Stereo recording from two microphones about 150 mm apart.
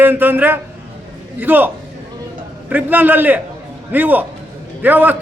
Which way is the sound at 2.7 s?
10° right (ahead or behind).